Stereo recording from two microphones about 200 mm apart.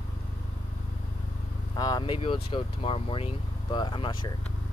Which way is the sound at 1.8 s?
20° left (ahead or behind).